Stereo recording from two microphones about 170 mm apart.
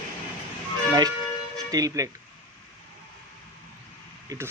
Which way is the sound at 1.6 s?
20° right (ahead or behind).